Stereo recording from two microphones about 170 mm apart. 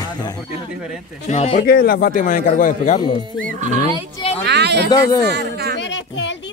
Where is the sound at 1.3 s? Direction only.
40° left (ahead or behind).